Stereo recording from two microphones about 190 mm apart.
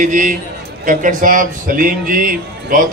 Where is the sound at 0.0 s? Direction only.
40° right (ahead or behind).